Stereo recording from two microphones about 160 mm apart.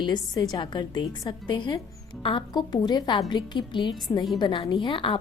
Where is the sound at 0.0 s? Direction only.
25° left (ahead or behind).